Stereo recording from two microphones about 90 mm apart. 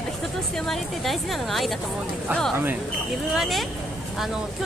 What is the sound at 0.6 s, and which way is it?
A woman's voice, centre (ahead or behind).